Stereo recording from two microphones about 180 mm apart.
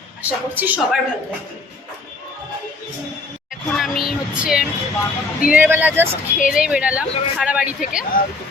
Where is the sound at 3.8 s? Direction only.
Centre (ahead or behind).